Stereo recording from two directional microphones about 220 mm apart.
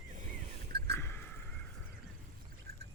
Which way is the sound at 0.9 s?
10° left (ahead or behind).